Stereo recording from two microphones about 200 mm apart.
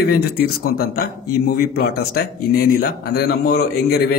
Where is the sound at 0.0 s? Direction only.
50° left (ahead or behind).